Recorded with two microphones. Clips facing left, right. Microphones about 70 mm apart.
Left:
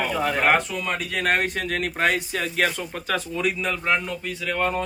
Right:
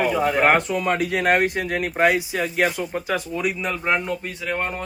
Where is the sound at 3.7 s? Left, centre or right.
Right.